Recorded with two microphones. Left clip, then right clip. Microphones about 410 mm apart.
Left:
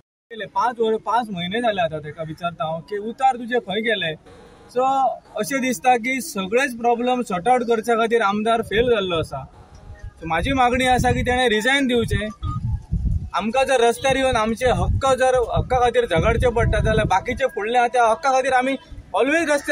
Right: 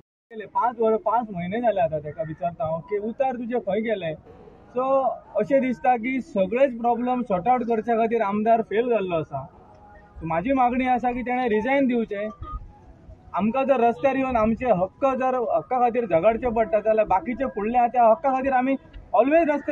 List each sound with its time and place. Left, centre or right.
0.3 s a man's voice: right
13.3 s a man's voice: right